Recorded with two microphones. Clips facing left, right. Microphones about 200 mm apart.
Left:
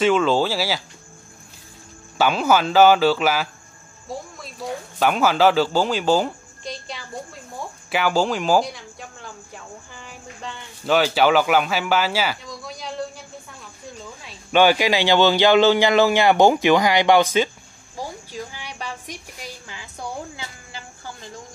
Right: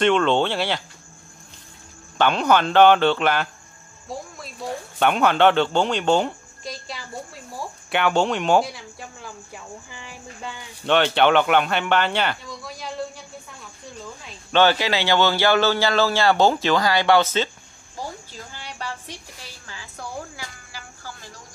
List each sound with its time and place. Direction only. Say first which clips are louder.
0.0 s speech: left 1 dB; 5° left (ahead or behind)
2.1 s speech: even; 5° left (ahead or behind)
7.5 s a sound: even; centre (ahead or behind)
11.0 s speech: even; 5° left (ahead or behind)
14.2 s speech: left 2 dB; 10° left (ahead or behind)
17.9 s a sound: left 3 dB; 15° left (ahead or behind)